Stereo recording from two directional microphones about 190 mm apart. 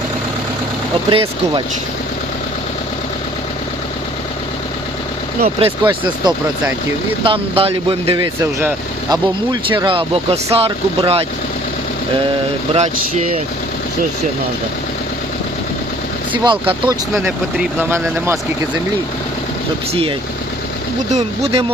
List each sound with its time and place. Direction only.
1.1 s speech: 25° right (ahead or behind)
5.5 s speech: 25° right (ahead or behind)
12.7 s speech: 35° right (ahead or behind)
16.4 s speech: 25° right (ahead or behind)
17.7 s speech: 10° right (ahead or behind)
19.9 s speech: 30° right (ahead or behind)